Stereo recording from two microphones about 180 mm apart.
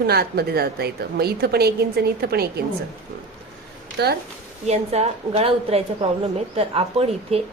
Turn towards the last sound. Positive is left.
turn(degrees=-35)  # may be behind; listen again after turning